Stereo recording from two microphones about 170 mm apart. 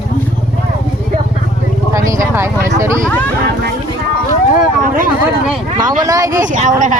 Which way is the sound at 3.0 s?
10° left (ahead or behind).